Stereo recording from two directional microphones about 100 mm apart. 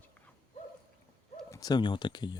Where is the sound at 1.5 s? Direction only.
40° left (ahead or behind).